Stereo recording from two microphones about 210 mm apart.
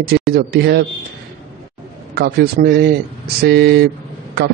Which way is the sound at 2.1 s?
50° right (ahead or behind).